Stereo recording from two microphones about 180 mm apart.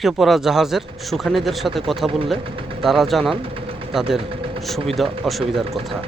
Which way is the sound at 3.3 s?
30° right (ahead or behind).